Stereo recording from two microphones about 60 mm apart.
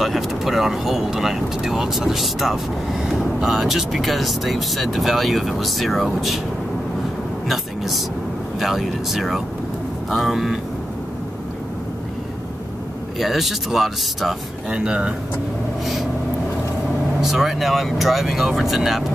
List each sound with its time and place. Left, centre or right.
0.0 s speech: centre
7.4 s a sound: centre
8.5 s speech: centre
13.2 s speech: centre
14.7 s speech: centre
15.8 s speech: centre
17.2 s speech: centre